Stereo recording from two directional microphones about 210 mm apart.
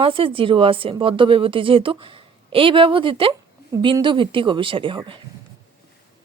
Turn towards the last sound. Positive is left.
turn(degrees=-25)  # may be behind; listen again after turning